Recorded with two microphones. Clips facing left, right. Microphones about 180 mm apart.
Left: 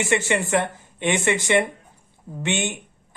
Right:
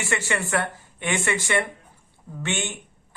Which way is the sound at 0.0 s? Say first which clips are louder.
Left 5 dB; 20° left (ahead or behind).